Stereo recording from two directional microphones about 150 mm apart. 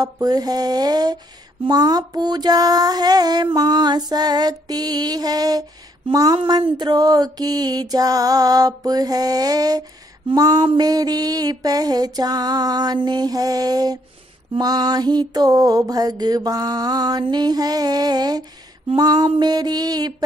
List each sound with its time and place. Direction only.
0.0 s music: 25° right (ahead or behind)